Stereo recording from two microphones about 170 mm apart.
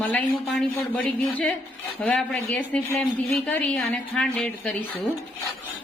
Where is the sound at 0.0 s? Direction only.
10° left (ahead or behind).